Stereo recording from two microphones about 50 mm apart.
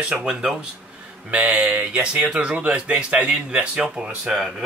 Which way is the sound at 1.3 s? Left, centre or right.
Right.